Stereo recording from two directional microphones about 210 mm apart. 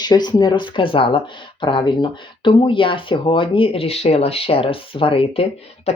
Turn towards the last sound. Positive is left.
turn(degrees=30)  # may be behind; listen again after turning